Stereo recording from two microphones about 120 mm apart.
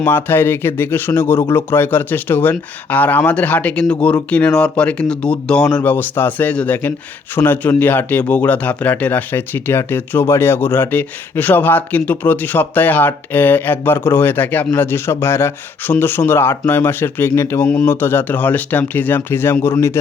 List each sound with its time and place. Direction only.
0.0 s speech: 15° left (ahead or behind)